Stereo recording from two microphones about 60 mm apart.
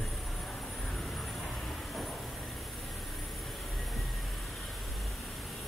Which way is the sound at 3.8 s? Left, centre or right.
Centre.